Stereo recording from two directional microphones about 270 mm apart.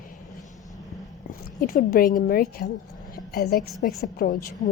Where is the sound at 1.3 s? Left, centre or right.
Left.